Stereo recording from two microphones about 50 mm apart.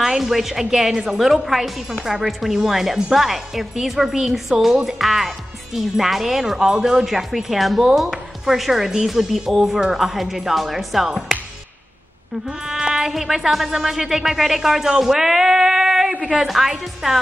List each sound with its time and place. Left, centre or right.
0.0 s a woman's voice: centre
12.4 s speech: centre
16.4 s a woman's voice: centre